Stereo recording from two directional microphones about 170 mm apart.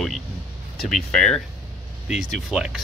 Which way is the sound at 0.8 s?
5° left (ahead or behind).